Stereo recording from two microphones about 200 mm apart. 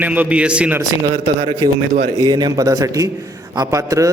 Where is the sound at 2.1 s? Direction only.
20° right (ahead or behind).